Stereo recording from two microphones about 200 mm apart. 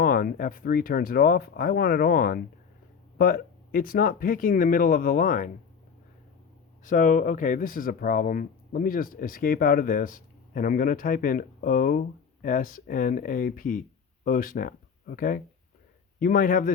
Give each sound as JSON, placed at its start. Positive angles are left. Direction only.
{"t": 0.0, "sound": "speech", "side_deg": 45}
{"t": 6.8, "sound": "speech", "side_deg": 40}